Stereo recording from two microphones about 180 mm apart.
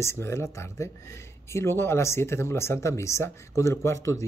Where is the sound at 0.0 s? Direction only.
15° left (ahead or behind).